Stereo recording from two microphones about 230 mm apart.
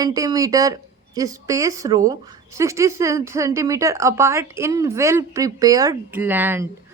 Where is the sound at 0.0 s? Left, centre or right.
Centre.